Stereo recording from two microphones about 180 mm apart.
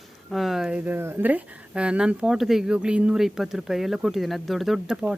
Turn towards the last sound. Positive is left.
turn(degrees=0)  # may be behind; listen again after turning